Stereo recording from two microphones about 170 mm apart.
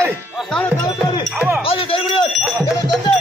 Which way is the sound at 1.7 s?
30° left (ahead or behind).